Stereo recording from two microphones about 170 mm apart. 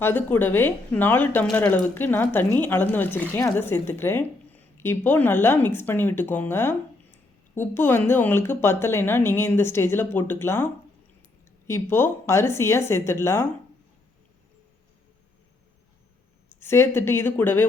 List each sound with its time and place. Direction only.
0.0 s speech: 10° left (ahead or behind)
11.7 s speech: 15° left (ahead or behind)
16.6 s speech: 15° left (ahead or behind)